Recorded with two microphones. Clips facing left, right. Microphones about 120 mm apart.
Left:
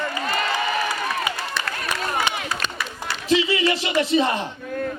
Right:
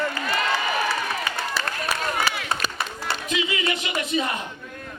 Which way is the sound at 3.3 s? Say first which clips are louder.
Left 8 dB; 30° left (ahead or behind).